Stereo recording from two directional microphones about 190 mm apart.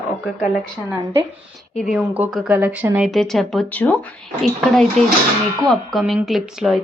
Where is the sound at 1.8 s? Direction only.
5° right (ahead or behind).